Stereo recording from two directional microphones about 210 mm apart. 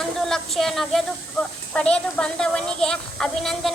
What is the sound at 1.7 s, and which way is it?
A woman's voice, 5° left (ahead or behind).